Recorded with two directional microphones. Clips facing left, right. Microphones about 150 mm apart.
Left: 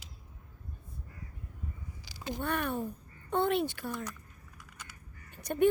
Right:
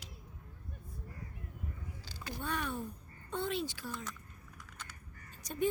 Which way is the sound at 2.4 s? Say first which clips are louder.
Left 5 dB; 60° left (ahead or behind).